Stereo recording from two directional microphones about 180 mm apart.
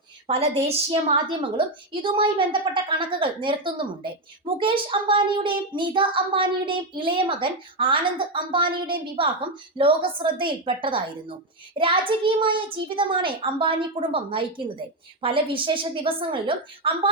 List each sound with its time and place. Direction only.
0.3 s a child's voice: 35° right (ahead or behind)